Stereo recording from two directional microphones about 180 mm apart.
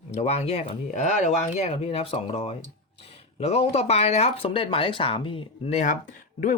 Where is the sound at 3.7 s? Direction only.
35° left (ahead or behind).